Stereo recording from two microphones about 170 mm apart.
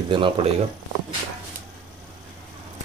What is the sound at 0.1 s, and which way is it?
Speech, 30° right (ahead or behind).